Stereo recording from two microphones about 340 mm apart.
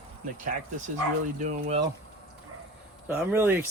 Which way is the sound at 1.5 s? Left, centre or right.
Right.